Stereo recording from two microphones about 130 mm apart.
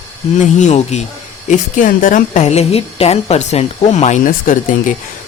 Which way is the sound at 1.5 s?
90° left.